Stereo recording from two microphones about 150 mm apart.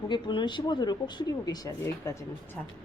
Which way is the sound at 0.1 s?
30° left (ahead or behind).